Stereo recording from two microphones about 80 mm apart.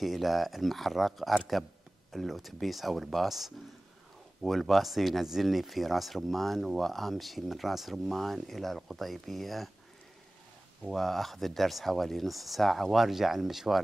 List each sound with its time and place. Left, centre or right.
0.0 s speech: centre
10.8 s speech: centre